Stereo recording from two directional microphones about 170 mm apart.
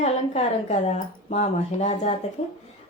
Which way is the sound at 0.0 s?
40° left (ahead or behind).